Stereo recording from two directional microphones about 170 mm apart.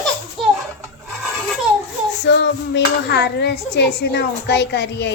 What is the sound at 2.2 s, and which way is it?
A child's voice, 90° left.